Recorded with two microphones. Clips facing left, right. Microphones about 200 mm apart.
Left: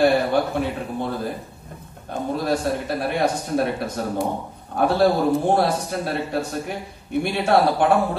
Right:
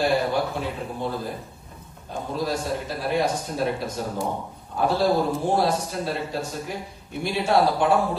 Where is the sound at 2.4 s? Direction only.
60° left (ahead or behind).